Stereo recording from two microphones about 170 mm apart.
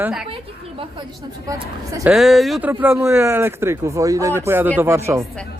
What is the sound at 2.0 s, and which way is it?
Speech, centre (ahead or behind).